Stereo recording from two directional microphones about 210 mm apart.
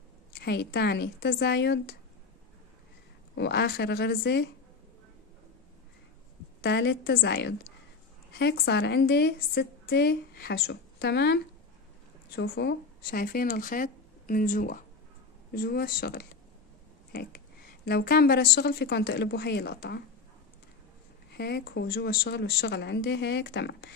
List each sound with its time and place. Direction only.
0.4 s a woman's voice: 50° left (ahead or behind)
3.3 s a woman's voice: 50° left (ahead or behind)
6.6 s a woman's voice: 50° left (ahead or behind)
21.3 s a woman's voice: 50° left (ahead or behind)